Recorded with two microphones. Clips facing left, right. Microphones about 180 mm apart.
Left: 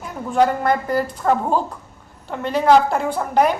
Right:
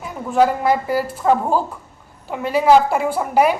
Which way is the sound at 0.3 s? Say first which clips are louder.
Right 1 dB; 5° right (ahead or behind).